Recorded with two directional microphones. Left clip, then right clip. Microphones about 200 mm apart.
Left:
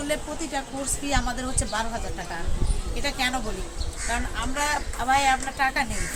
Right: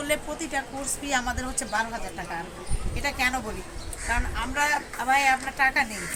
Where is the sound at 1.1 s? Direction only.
Centre (ahead or behind).